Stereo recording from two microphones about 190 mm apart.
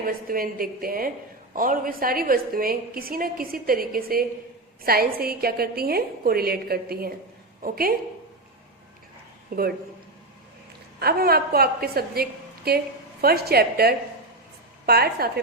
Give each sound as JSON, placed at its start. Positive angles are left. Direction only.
{"t": 0.0, "sound": "a woman's voice", "side_deg": -50}
{"t": 9.5, "sound": "a woman's voice", "side_deg": -50}
{"t": 11.0, "sound": "a woman's voice", "side_deg": -55}